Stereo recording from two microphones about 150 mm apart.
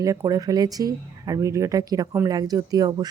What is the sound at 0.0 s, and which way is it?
Speech, 25° right (ahead or behind).